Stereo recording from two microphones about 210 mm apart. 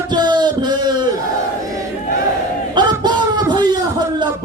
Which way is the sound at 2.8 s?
20° right (ahead or behind).